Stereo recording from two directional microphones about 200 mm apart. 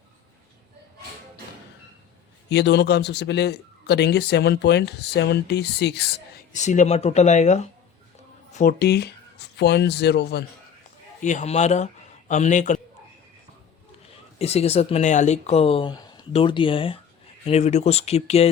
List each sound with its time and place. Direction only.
2.5 s a man's voice: 60° left (ahead or behind)
6.5 s speech: 35° left (ahead or behind)
8.5 s speech: 50° left (ahead or behind)
11.2 s speech: 35° left (ahead or behind)
14.3 s speech: 30° left (ahead or behind)